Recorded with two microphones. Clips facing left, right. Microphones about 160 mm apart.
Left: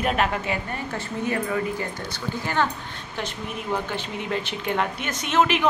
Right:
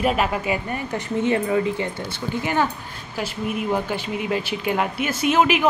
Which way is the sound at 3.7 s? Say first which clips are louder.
Right 4 dB; 10° right (ahead or behind).